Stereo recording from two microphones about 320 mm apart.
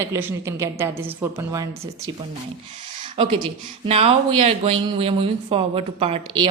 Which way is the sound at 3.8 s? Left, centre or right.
Centre.